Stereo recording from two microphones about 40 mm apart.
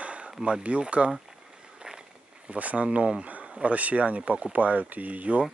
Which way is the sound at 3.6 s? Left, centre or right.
Right.